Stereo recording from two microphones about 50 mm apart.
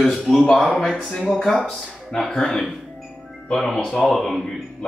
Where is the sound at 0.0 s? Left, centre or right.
Centre.